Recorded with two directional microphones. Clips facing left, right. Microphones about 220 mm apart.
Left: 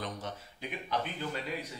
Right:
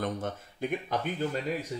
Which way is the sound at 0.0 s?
50° right (ahead or behind).